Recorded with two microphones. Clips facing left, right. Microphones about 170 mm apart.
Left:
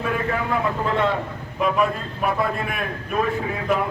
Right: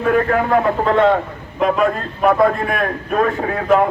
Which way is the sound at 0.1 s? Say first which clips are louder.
Right 11 dB; 60° right (ahead or behind).